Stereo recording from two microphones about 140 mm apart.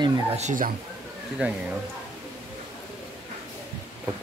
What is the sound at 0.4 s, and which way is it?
Speech, 70° right (ahead or behind).